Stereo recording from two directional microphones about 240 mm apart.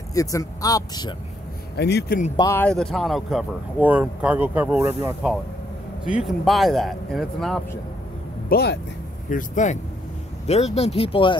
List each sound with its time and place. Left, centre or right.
0.1 s speech: centre
1.8 s speech: left
2.3 s speech: centre
8.5 s speech: left